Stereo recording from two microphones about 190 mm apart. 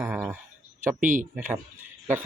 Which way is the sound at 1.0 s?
45° right (ahead or behind).